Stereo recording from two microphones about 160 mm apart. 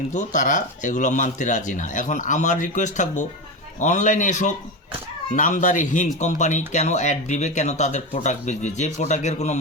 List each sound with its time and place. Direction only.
0.1 s speech: 50° left (ahead or behind)